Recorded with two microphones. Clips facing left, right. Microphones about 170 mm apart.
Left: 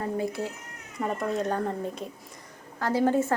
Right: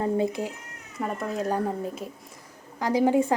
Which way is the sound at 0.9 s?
Centre (ahead or behind).